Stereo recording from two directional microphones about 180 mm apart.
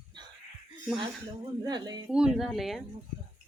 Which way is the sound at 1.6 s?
25° right (ahead or behind).